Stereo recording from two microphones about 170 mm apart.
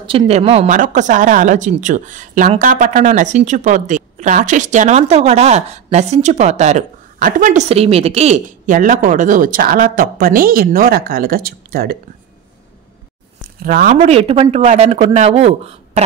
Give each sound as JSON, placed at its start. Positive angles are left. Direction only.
{"t": 0.0, "sound": "a woman's voice", "side_deg": -30}
{"t": 13.4, "sound": "a sound", "side_deg": -55}
{"t": 14.0, "sound": "speech", "side_deg": -35}